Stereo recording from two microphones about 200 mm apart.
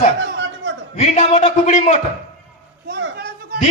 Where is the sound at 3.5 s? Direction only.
50° right (ahead or behind).